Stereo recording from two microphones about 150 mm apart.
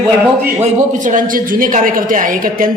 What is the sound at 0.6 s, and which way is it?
A man's voice, 60° right (ahead or behind).